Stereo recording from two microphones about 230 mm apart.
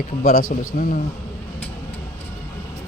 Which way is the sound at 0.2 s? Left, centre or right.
Left.